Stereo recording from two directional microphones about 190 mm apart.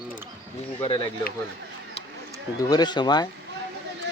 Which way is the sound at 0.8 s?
25° left (ahead or behind).